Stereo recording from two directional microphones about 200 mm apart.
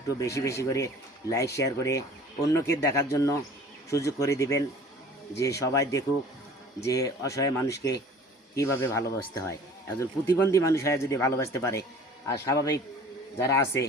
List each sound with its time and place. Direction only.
0.1 s speech: 15° left (ahead or behind)